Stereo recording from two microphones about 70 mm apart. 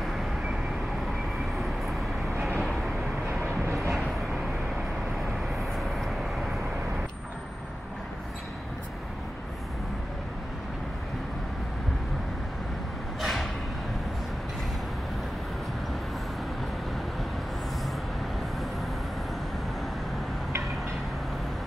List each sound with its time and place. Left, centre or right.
3.6 s vehicle: right
5.6 s vehicle: centre
13.2 s vehicle: centre